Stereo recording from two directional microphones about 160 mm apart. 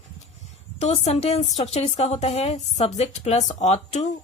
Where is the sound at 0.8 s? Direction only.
45° left (ahead or behind).